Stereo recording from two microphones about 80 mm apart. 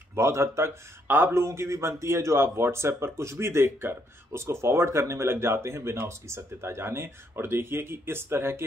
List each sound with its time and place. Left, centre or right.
0.1 s speech: right